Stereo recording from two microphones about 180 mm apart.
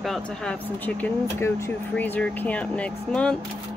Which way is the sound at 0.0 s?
Centre (ahead or behind).